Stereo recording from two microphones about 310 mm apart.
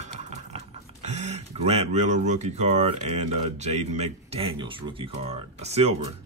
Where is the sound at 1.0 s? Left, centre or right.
Right.